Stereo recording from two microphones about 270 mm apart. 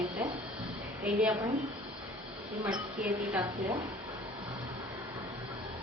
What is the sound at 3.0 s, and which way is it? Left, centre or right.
Speech, centre.